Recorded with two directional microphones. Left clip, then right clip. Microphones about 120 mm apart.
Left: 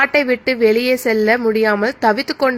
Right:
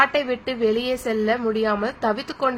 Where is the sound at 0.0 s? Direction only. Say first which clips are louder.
Left 5 dB; 35° left (ahead or behind).